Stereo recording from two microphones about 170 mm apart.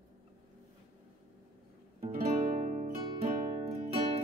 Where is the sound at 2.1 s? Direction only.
45° right (ahead or behind).